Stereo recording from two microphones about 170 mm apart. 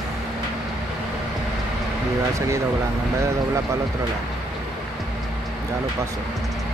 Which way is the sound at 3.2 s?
20° right (ahead or behind).